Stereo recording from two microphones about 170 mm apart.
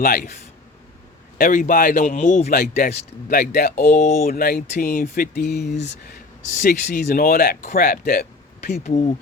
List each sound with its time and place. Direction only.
0.0 s speech: 60° left (ahead or behind)
1.4 s speech: 50° left (ahead or behind)
2.6 s speech: 65° left (ahead or behind)
4.0 s speech: 40° left (ahead or behind)
4.3 s speech: 60° left (ahead or behind)
6.5 s speech: 50° left (ahead or behind)
8.8 s speech: 40° left (ahead or behind)